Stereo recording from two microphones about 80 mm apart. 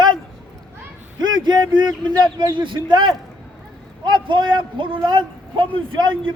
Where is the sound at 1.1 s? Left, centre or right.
Right.